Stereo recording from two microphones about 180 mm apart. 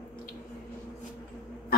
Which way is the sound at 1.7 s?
55° left (ahead or behind).